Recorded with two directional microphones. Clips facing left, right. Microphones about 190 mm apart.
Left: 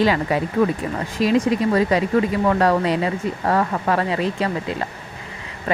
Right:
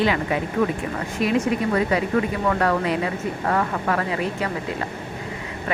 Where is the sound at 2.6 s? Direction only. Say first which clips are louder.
Left 3 dB; 30° left (ahead or behind).